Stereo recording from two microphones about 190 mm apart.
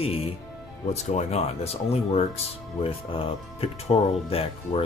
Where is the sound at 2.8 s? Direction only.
30° left (ahead or behind).